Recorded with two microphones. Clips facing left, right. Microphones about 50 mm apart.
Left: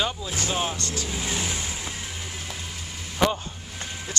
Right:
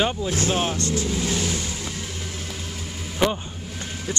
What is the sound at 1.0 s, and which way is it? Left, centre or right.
Vehicle, centre.